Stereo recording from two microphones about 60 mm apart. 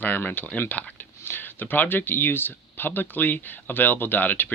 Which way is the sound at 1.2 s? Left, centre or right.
Left.